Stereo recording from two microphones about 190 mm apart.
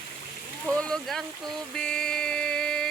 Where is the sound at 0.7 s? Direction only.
5° left (ahead or behind).